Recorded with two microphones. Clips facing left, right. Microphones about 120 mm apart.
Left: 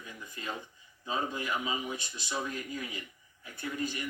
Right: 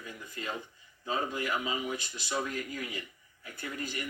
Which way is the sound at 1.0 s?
20° left (ahead or behind).